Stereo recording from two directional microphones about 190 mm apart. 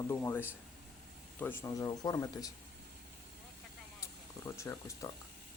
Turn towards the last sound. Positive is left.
turn(degrees=15)  # may be behind; listen again after turning